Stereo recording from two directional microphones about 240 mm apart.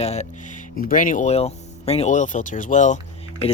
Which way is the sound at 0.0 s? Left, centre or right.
Left.